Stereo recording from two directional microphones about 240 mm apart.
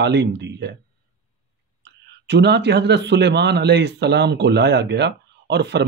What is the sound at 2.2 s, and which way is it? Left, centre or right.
Speech, right.